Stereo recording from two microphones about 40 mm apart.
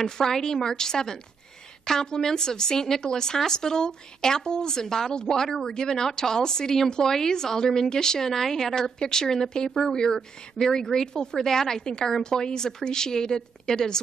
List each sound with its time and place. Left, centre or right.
0.0 s a woman's voice: centre